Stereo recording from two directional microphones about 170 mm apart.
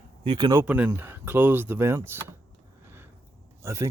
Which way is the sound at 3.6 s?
15° right (ahead or behind).